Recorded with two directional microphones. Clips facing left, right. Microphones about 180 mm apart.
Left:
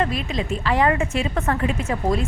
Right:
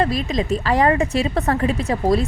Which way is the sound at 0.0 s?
40° right (ahead or behind).